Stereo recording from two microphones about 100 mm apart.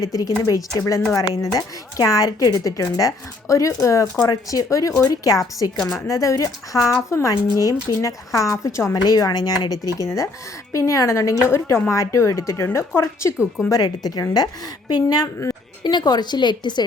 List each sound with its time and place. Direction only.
0.0 s a woman's voice: 35° left (ahead or behind)
9.0 s a woman's voice: 40° left (ahead or behind)
10.7 s a woman's voice: 30° left (ahead or behind); by 16.8 s 50° left (ahead or behind)